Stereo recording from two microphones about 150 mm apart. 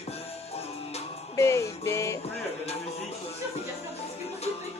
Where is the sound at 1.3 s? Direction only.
20° left (ahead or behind).